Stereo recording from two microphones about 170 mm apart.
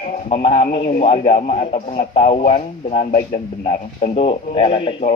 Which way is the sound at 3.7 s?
35° left (ahead or behind).